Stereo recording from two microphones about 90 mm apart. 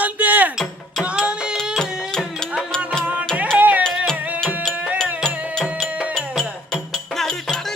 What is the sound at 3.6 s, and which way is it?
Music, 15° right (ahead or behind).